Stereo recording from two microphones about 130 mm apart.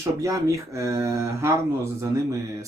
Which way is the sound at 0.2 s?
25° right (ahead or behind).